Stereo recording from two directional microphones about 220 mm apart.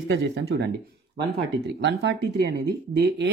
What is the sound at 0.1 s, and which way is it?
Speech, 50° right (ahead or behind).